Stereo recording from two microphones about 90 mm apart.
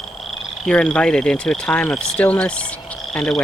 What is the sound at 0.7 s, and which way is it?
Speech, 10° left (ahead or behind).